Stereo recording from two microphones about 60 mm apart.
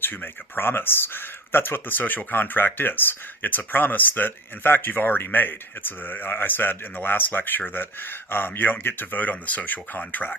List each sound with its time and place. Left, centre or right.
0.0 s speech: left